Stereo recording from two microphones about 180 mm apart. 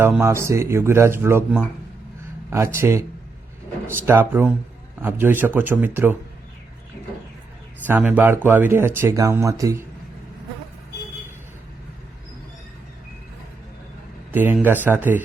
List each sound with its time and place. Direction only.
0.2 s speech: 15° right (ahead or behind)
7.9 s speech: 10° right (ahead or behind)
14.3 s speech: 10° right (ahead or behind)